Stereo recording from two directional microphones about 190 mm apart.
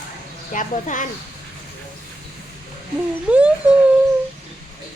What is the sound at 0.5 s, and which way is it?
Speech, 40° left (ahead or behind).